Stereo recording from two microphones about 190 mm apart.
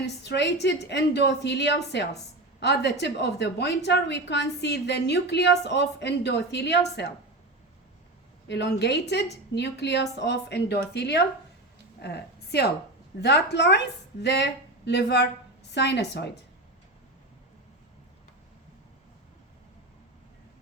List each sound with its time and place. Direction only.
0.0 s a woman's voice: 65° left (ahead or behind)
8.4 s a woman's voice: 65° left (ahead or behind)